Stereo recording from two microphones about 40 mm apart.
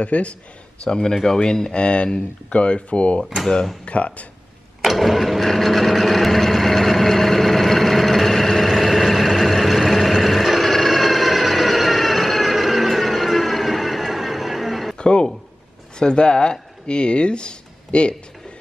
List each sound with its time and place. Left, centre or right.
0.0 s speech: left
0.8 s speech: centre
4.8 s sewing machine: centre
15.0 s a sound: left
16.0 s speech: left